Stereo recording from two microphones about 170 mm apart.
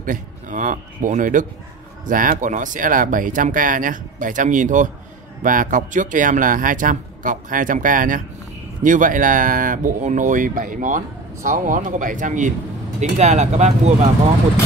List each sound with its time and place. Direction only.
0.0 s a man's voice: 50° right (ahead or behind)